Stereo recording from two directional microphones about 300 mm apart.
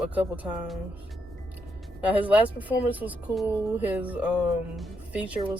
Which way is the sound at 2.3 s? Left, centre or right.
Centre.